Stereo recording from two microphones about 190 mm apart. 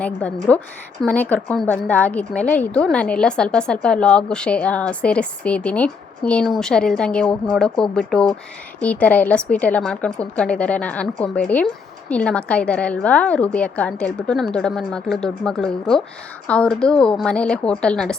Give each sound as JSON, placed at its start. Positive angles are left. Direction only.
{"t": 0.0, "sound": "a woman's voice", "side_deg": 5}